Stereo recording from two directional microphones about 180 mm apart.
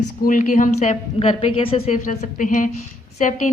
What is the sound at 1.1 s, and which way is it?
A woman's voice, 35° left (ahead or behind).